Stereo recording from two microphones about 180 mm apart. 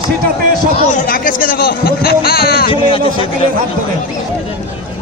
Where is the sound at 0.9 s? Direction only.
50° left (ahead or behind).